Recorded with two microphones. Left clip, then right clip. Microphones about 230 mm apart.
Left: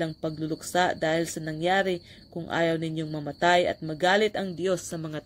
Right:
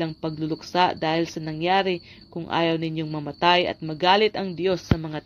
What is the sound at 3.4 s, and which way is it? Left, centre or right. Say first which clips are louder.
Speech: right 2 dB; right.